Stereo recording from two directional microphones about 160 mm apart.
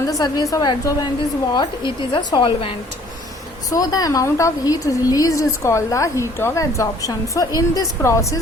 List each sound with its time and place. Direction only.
0.1 s a woman's voice: 25° left (ahead or behind)
3.7 s a woman's voice: 25° left (ahead or behind)